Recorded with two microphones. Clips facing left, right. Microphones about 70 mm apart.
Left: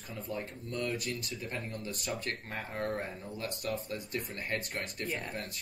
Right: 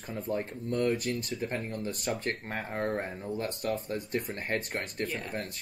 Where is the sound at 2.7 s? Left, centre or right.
Right.